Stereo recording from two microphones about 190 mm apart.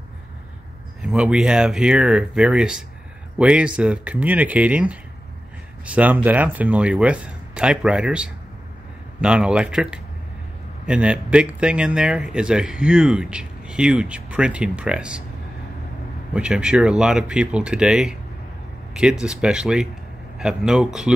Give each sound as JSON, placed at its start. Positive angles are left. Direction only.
{"t": 1.0, "sound": "speech", "side_deg": -5}
{"t": 16.3, "sound": "speech", "side_deg": -5}